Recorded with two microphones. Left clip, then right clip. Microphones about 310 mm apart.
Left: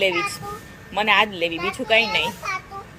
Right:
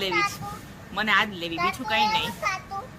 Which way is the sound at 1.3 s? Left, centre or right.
Centre.